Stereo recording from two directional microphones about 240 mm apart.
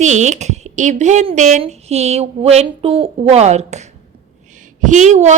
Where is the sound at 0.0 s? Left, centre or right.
Right.